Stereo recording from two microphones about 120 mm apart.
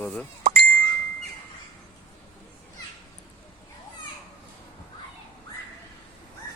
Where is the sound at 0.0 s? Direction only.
5° left (ahead or behind).